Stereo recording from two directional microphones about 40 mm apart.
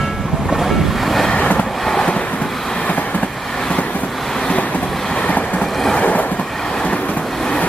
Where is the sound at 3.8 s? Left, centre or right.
Left.